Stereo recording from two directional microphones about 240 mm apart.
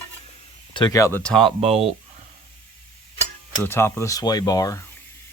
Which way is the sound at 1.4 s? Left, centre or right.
Right.